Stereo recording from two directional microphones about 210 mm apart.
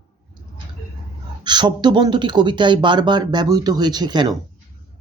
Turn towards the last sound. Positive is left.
turn(degrees=-20)  # may be behind; listen again after turning